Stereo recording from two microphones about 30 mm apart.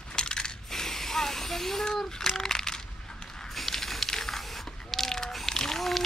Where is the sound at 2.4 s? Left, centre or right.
Centre.